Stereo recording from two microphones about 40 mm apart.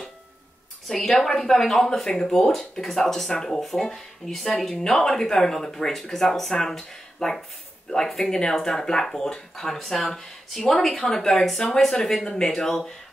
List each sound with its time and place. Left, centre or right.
0.8 s speech: centre